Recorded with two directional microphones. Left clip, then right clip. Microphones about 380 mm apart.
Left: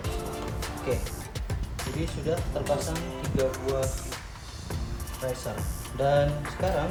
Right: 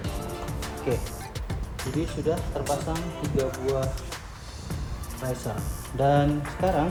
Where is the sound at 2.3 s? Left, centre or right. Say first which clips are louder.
Right 2 dB; centre.